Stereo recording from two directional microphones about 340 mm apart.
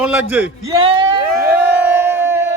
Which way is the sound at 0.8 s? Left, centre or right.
Centre.